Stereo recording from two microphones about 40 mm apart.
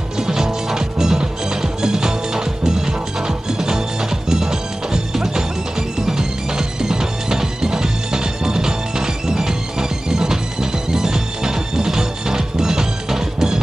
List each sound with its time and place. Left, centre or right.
0.2 s music: centre